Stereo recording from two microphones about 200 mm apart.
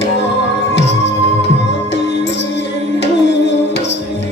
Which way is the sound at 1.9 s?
60° left (ahead or behind).